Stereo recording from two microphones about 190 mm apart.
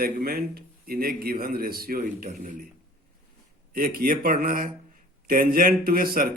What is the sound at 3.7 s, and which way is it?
Speech, 50° right (ahead or behind).